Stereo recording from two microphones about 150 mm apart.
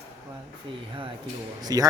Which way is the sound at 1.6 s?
25° right (ahead or behind).